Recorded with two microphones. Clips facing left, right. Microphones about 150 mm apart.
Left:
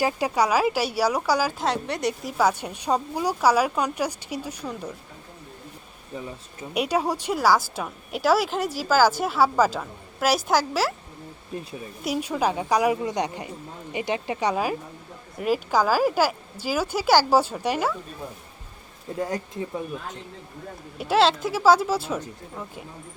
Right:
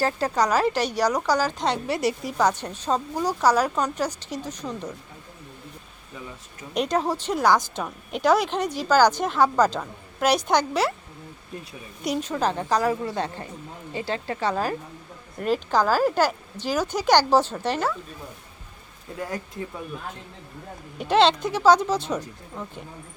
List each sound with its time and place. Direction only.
0.0 s a woman's voice: 10° left (ahead or behind)
6.7 s speech: 10° left (ahead or behind)
12.0 s a woman's voice: 5° left (ahead or behind)
19.2 s speech: 20° left (ahead or behind)
21.0 s speech: 5° left (ahead or behind)